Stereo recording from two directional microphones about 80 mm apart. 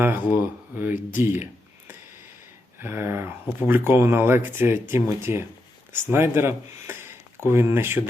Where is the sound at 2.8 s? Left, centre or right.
Right.